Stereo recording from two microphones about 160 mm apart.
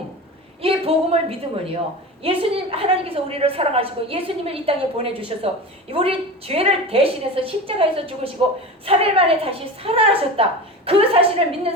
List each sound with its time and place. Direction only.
0.6 s a woman's voice: 35° right (ahead or behind)